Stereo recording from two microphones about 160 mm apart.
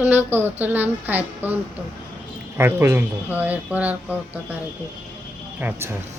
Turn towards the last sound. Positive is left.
turn(degrees=-15)  # may be behind; listen again after turning